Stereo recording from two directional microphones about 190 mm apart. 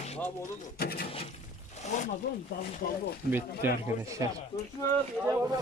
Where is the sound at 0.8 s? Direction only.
55° left (ahead or behind).